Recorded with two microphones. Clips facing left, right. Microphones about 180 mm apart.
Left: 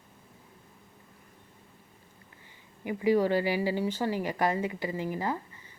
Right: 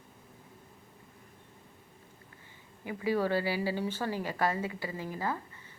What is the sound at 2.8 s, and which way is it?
A woman's voice, 15° left (ahead or behind).